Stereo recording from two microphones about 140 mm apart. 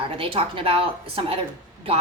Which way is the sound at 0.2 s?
40° right (ahead or behind).